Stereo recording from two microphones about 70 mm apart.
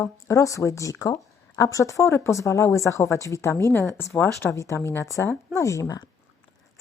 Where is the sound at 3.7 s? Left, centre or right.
Left.